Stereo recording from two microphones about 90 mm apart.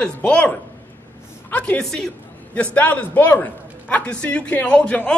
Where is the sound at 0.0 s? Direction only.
15° left (ahead or behind).